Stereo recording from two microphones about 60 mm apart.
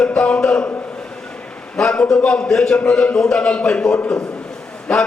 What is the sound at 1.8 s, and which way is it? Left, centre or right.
A man's voice, centre.